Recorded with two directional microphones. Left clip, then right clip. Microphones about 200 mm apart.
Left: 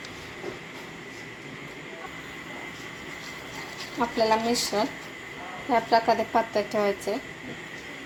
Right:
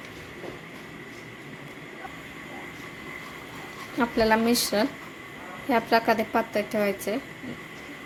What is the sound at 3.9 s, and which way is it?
A woman's voice, 25° right (ahead or behind).